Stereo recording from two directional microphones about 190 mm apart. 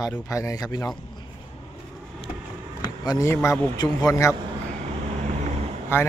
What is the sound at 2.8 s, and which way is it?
A man's voice, 20° left (ahead or behind).